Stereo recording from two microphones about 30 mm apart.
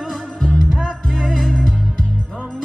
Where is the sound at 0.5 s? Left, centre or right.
Centre.